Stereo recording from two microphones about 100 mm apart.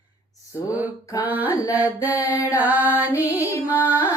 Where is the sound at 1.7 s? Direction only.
15° right (ahead or behind).